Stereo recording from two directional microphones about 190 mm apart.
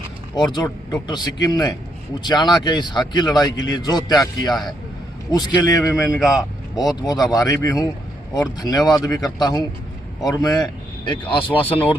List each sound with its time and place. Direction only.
0.3 s a man's voice: 20° left (ahead or behind)